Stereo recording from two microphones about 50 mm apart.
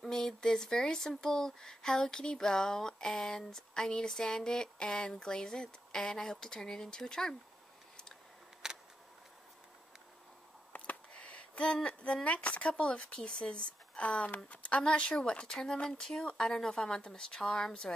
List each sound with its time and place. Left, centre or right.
0.0 s speech: centre
8.6 s a sound: centre
11.1 s speech: left